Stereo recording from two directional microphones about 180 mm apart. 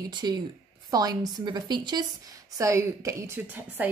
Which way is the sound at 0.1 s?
25° right (ahead or behind).